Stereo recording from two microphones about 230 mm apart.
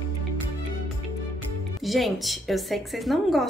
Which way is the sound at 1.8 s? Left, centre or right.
Centre.